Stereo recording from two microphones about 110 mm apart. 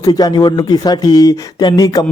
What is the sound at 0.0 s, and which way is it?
A man's voice, 40° left (ahead or behind).